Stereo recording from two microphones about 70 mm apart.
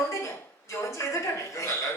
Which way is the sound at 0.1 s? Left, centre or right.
Left.